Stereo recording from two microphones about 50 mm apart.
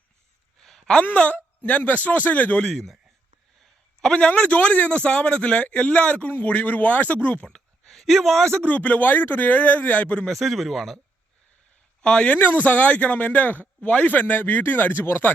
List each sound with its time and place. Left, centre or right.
0.6 s a sound: centre
1.1 s speech: left
2.6 s speech: centre
4.0 s speech: centre
7.4 s speech: centre
8.5 s speech: left
10.2 s speech: centre
12.0 s speech: left
12.4 s speech: left